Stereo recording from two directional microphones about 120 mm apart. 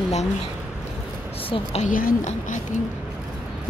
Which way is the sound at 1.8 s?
90° left.